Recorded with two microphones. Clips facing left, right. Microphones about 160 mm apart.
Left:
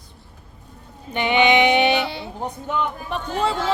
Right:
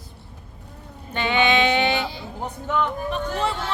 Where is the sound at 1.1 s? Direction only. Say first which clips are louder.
Left 3 dB; 15° left (ahead or behind).